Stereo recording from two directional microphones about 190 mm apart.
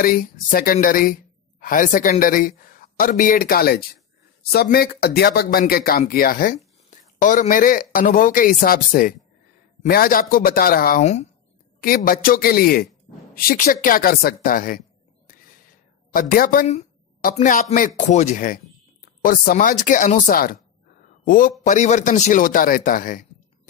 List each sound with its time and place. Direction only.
0.0 s speech: 45° left (ahead or behind)
11.8 s speech: 50° left (ahead or behind)
16.1 s a woman's voice: 50° left (ahead or behind)